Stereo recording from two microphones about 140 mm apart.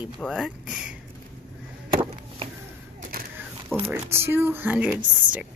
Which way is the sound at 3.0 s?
90° right.